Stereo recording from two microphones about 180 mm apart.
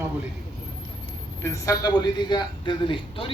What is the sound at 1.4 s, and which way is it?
A man's voice, 20° left (ahead or behind).